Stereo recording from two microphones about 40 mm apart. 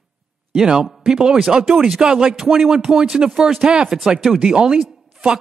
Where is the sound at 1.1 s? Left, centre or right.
Centre.